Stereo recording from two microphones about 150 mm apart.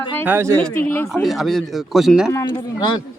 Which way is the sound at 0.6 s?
10° left (ahead or behind).